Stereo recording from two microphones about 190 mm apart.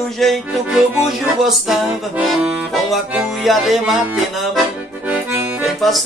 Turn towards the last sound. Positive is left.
turn(degrees=0)  # may be behind; listen again after turning